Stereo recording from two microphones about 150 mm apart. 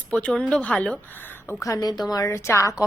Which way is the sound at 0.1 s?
5° left (ahead or behind).